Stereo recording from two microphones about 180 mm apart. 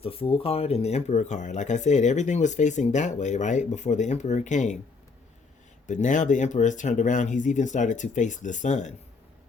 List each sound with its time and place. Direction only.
0.0 s speech: 30° left (ahead or behind)
5.9 s speech: 45° left (ahead or behind)